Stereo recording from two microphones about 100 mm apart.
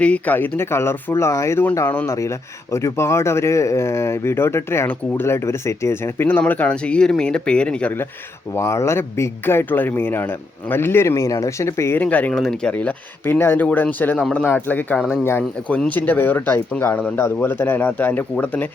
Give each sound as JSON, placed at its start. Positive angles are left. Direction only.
{"t": 0.0, "sound": "speech", "side_deg": 15}
{"t": 8.5, "sound": "speech", "side_deg": 30}
{"t": 12.0, "sound": "speech", "side_deg": 15}